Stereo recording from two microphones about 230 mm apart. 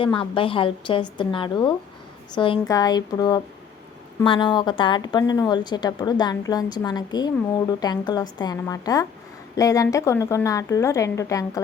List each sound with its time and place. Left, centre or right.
0.0 s a woman's voice: left